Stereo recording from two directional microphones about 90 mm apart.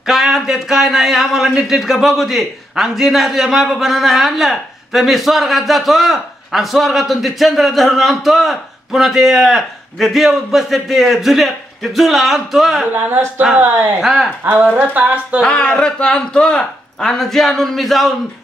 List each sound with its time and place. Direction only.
0.0 s a man's voice: 5° right (ahead or behind)
12.9 s speech: 20° right (ahead or behind)
14.0 s a man's voice: 5° right (ahead or behind)
14.4 s speech: 20° right (ahead or behind)
15.4 s a man's voice: 10° left (ahead or behind)